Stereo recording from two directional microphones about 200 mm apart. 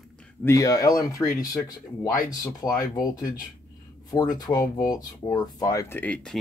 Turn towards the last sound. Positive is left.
turn(degrees=5)  # may be behind; listen again after turning